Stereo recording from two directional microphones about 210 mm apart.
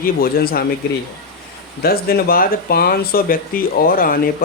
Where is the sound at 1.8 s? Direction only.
45° left (ahead or behind).